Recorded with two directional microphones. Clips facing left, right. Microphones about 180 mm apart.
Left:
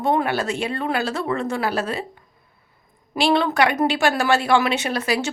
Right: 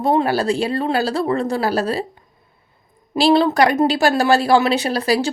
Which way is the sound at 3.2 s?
35° right (ahead or behind).